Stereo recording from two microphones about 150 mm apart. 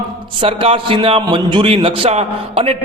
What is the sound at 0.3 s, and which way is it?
A man's voice, 40° right (ahead or behind).